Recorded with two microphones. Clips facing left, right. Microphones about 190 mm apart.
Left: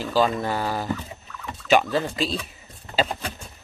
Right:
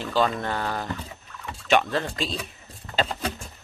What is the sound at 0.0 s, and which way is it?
Speech, 5° left (ahead or behind).